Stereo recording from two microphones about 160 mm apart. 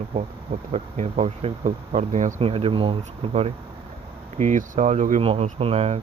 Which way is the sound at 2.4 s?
35° right (ahead or behind).